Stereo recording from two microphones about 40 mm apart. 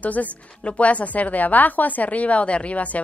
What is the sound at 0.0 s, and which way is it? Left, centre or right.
A woman's voice, left.